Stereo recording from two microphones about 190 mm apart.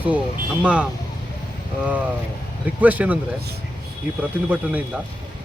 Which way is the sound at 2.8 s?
10° right (ahead or behind).